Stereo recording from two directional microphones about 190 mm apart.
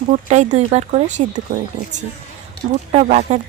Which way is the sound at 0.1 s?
40° right (ahead or behind).